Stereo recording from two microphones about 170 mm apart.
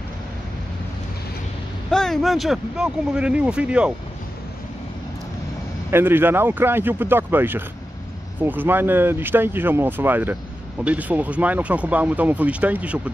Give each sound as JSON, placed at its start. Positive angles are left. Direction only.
{"t": 1.9, "sound": "speech", "side_deg": 5}
{"t": 5.9, "sound": "speech", "side_deg": -15}